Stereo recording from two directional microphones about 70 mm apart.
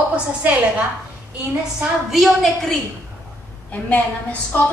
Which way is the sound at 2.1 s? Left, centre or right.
Centre.